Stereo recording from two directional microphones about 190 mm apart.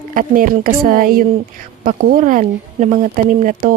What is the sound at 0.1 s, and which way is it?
Speech, 50° right (ahead or behind).